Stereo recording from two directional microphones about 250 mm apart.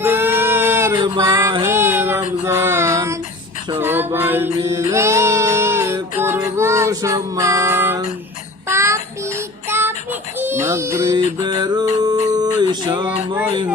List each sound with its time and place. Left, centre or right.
0.0 s female singing: centre
2.4 s child singing: centre
3.8 s music: centre
6.6 s child singing: centre
11.4 s music: centre
12.3 s a sound: centre
13.1 s music: centre